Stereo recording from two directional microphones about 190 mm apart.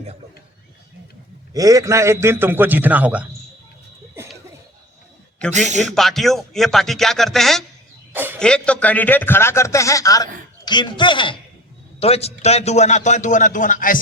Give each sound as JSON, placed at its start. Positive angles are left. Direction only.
{"t": 1.5, "sound": "a man's voice", "side_deg": -20}
{"t": 5.5, "sound": "a man's voice", "side_deg": -40}
{"t": 5.9, "sound": "speech", "side_deg": 0}
{"t": 8.1, "sound": "a sound", "side_deg": -10}
{"t": 8.4, "sound": "a man's voice", "side_deg": 5}